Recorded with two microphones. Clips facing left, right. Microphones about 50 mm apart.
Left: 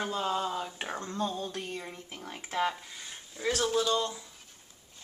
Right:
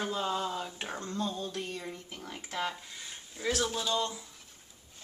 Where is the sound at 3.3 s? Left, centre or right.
Centre.